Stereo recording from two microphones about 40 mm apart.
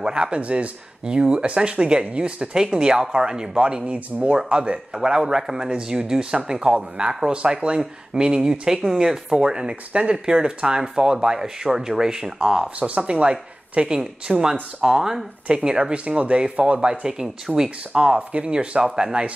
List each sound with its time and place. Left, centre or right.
0.0 s speech: right
4.9 s speech: centre
12.7 s speech: right; by 15.2 s centre
15.4 s speech: right
18.9 s speech: centre